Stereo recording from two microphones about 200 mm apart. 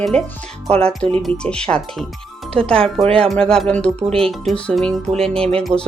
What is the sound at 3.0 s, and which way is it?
Speech, 30° right (ahead or behind).